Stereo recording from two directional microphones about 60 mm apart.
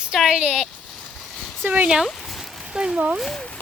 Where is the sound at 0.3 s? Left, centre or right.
Centre.